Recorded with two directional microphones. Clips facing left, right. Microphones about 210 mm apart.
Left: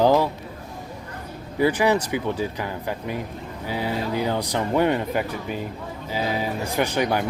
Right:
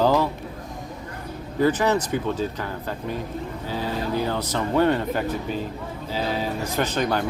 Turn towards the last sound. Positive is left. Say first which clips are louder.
# left 1 dB
turn(degrees=10)  # may be behind; listen again after turning